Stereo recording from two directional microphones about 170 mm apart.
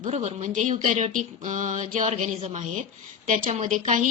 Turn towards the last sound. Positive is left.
turn(degrees=-45)  # may be behind; listen again after turning